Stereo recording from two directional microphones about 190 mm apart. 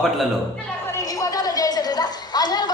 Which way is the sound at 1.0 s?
20° left (ahead or behind).